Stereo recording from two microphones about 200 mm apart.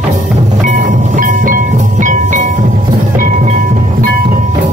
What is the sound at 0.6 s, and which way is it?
Music, 40° right (ahead or behind).